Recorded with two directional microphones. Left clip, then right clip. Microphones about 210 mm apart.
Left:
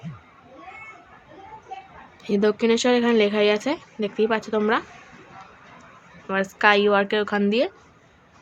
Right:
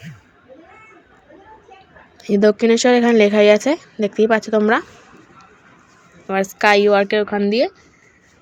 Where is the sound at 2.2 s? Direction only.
30° right (ahead or behind).